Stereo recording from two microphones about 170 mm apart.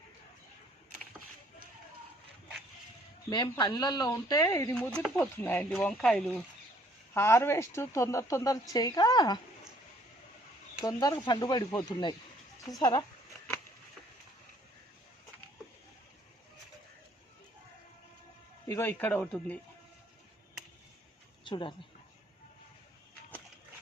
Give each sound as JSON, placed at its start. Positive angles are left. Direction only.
{"t": 3.2, "sound": "speech", "side_deg": 25}
{"t": 4.7, "sound": "speech", "side_deg": 5}
{"t": 10.8, "sound": "speech", "side_deg": 25}
{"t": 18.7, "sound": "speech", "side_deg": 15}
{"t": 21.4, "sound": "speech", "side_deg": 30}